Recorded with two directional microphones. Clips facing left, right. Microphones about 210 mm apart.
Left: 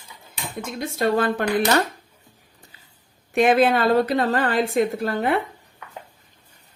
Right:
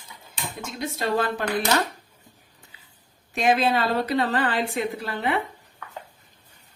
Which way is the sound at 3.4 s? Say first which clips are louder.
Left 5 dB; 55° left (ahead or behind).